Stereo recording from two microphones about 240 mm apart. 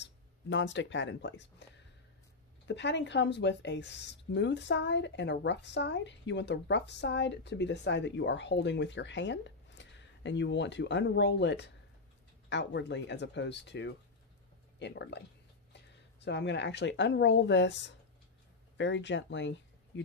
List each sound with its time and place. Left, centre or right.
0.0 s speech: left
2.6 s a woman's voice: left